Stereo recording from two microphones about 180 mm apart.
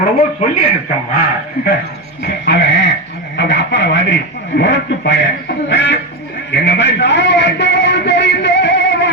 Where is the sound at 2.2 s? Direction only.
70° left (ahead or behind).